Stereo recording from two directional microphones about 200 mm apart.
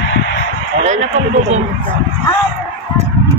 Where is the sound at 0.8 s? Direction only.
35° right (ahead or behind).